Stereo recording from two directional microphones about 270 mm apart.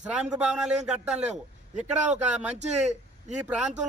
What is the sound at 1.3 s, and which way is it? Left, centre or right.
Speech, right.